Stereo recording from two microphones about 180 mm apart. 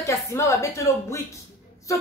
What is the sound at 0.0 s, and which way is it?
A woman's voice, 15° left (ahead or behind).